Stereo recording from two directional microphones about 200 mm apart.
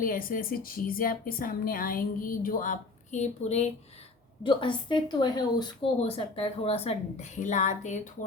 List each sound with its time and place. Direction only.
0.0 s a woman's voice: 45° left (ahead or behind)
4.4 s a woman's voice: 25° left (ahead or behind)